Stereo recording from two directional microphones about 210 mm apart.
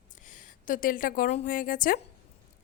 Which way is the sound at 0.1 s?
35° left (ahead or behind).